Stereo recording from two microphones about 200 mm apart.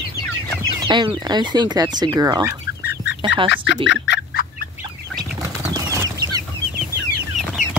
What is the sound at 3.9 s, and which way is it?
Fowl, 60° left (ahead or behind).